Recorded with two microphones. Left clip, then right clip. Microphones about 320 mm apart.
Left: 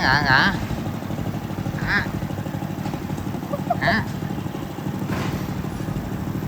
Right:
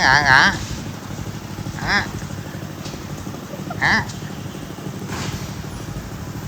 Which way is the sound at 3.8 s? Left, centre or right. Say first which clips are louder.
Right 5 dB; centre.